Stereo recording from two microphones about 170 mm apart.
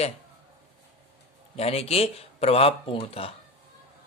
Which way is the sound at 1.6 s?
35° left (ahead or behind).